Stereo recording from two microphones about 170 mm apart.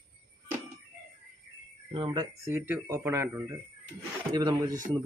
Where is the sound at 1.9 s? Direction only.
25° right (ahead or behind).